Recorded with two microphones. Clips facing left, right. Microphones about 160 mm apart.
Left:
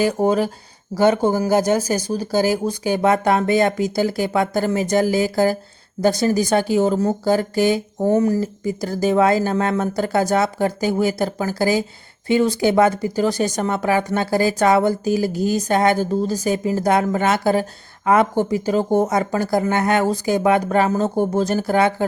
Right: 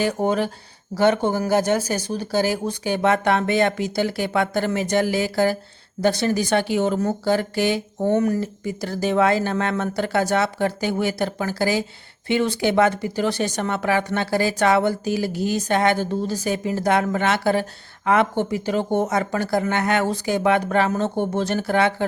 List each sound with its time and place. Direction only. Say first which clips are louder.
0.0 s speech: left 3 dB; 35° left (ahead or behind)
1.3 s speech: left 3 dB; 15° left (ahead or behind)
1.9 s speech: left 3 dB; 40° left (ahead or behind)